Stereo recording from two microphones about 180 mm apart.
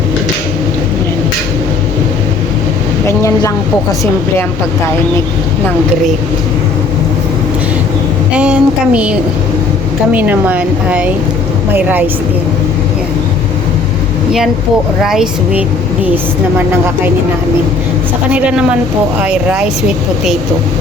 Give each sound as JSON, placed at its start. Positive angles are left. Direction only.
{"t": 3.1, "sound": "speech", "side_deg": 15}
{"t": 8.4, "sound": "speech", "side_deg": -5}
{"t": 15.0, "sound": "speech", "side_deg": -5}
{"t": 18.3, "sound": "speech", "side_deg": -5}